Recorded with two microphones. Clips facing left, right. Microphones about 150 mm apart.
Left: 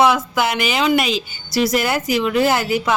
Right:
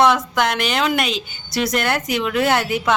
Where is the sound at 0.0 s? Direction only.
5° left (ahead or behind).